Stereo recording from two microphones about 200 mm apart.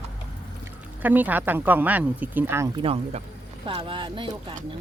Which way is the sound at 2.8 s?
30° right (ahead or behind).